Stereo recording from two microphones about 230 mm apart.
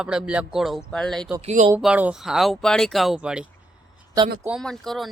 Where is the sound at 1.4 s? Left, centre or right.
Right.